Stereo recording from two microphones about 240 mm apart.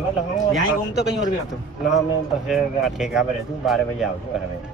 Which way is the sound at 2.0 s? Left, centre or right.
Centre.